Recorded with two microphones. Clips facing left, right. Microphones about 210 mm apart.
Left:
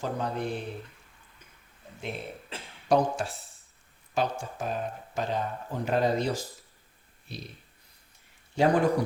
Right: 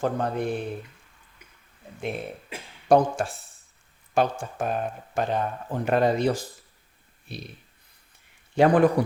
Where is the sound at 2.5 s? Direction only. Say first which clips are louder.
Right 2 dB; 10° right (ahead or behind).